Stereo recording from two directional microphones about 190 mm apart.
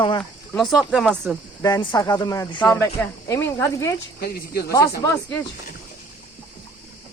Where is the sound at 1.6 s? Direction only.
20° left (ahead or behind).